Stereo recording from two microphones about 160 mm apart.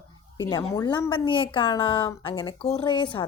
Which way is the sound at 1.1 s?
30° left (ahead or behind).